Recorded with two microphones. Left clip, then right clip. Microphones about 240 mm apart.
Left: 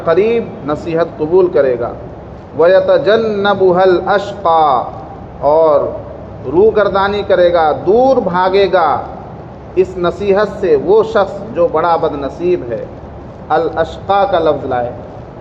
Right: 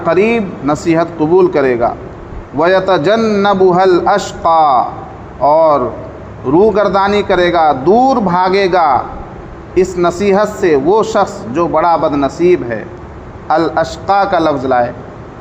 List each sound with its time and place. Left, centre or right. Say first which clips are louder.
0.0 s a man's voice: even; right